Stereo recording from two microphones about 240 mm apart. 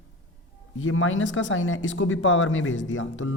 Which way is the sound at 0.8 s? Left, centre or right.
Left.